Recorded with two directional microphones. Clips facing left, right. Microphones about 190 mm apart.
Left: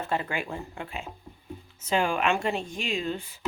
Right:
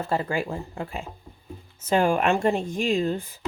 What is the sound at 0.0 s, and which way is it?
Speech, 35° right (ahead or behind).